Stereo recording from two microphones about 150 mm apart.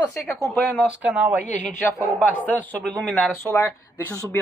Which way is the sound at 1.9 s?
20° left (ahead or behind).